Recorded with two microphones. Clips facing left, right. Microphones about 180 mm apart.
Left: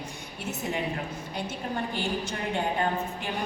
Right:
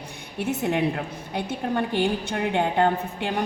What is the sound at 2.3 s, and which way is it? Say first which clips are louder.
Speech: right 5 dB; 65° right (ahead or behind).